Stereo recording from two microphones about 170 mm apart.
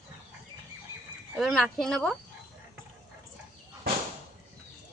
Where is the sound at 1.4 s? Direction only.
Centre (ahead or behind).